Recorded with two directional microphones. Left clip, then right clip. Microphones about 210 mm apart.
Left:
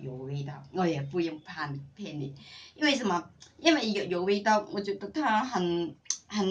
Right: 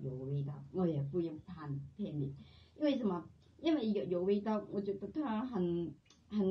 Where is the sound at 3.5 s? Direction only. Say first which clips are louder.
Left 10 dB; 30° left (ahead or behind).